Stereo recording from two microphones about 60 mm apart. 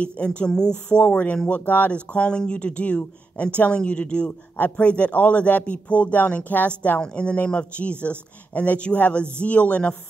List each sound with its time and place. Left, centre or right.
0.0 s speech: centre
7.0 s speech: centre